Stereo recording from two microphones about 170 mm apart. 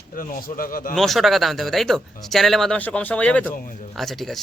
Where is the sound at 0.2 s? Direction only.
55° left (ahead or behind).